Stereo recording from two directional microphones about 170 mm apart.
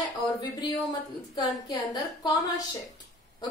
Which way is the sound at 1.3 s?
25° left (ahead or behind).